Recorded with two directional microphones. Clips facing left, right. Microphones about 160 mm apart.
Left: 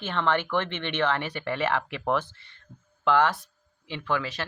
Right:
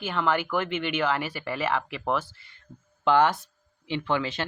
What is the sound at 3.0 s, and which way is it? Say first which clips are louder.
Speech: right 2 dB; 20° right (ahead or behind).